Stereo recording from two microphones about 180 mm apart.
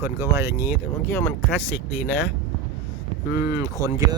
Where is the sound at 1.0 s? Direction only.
10° left (ahead or behind).